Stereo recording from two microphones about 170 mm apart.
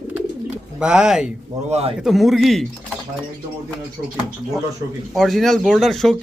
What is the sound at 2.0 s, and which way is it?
Speech, centre (ahead or behind).